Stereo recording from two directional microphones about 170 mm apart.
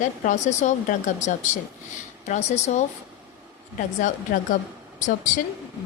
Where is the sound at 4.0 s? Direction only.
50° left (ahead or behind).